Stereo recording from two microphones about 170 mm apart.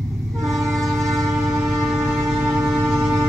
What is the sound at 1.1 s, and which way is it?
Train, 20° right (ahead or behind).